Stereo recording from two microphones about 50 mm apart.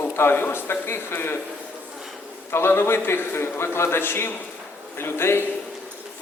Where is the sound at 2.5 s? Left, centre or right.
Left.